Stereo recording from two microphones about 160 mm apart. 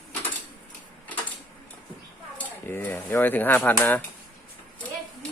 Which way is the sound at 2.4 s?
10° left (ahead or behind).